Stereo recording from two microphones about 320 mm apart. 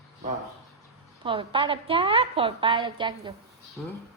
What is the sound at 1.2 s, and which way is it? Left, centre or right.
A woman's voice, centre.